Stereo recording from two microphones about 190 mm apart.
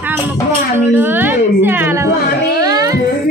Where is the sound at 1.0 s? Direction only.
10° right (ahead or behind).